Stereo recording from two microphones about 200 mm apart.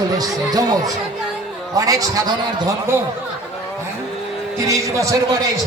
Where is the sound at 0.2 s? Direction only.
20° right (ahead or behind).